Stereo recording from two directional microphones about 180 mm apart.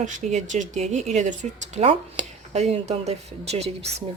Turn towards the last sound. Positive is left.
turn(degrees=-35)  # may be behind; listen again after turning